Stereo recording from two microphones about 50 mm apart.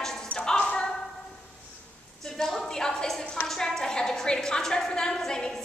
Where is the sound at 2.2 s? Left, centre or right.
Centre.